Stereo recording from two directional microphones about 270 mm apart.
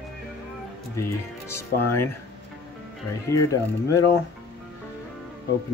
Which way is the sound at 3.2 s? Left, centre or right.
Centre.